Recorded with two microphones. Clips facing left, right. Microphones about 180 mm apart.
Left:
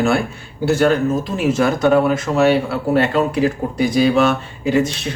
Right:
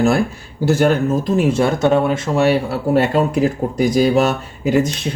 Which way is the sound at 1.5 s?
30° right (ahead or behind).